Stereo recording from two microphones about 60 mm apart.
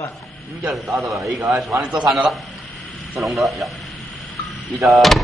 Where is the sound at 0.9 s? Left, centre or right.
Right.